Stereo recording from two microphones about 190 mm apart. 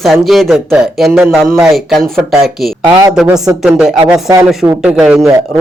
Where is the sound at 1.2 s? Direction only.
10° right (ahead or behind).